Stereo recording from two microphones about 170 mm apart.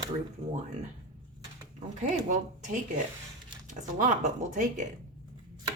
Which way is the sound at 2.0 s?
45° right (ahead or behind).